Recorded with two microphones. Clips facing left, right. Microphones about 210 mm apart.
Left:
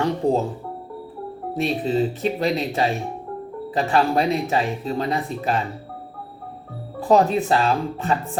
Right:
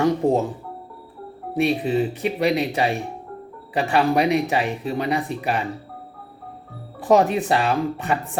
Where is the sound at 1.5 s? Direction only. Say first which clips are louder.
Right 1 dB; 15° right (ahead or behind).